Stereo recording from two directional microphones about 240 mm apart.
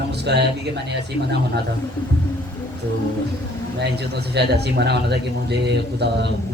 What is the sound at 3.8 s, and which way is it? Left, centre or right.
A man's voice, right.